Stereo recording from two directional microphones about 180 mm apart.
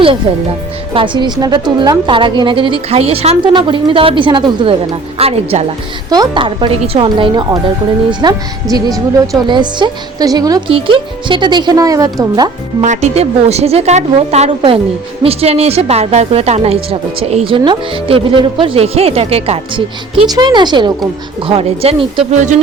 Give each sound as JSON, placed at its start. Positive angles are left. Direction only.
{"t": 0.9, "sound": "a woman's voice", "side_deg": -25}
{"t": 12.8, "sound": "a woman's voice", "side_deg": -40}
{"t": 22.4, "sound": "a woman's voice", "side_deg": -40}